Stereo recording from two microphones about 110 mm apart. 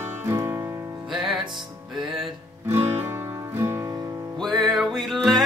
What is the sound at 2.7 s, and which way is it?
Guitar, 20° right (ahead or behind).